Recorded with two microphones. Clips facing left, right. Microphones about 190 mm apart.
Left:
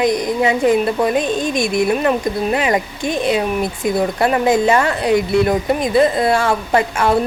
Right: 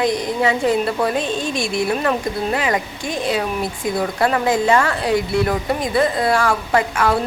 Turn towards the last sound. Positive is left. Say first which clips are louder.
# left 2 dB
turn(degrees=25)  # may be behind; listen again after turning